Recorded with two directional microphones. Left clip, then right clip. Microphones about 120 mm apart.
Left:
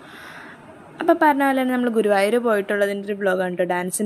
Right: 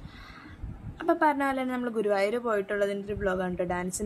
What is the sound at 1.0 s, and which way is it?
A woman's voice, 30° left (ahead or behind).